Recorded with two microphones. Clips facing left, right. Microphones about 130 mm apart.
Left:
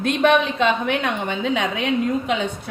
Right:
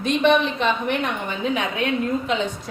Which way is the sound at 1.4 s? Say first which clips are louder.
Right 1 dB; 90° left.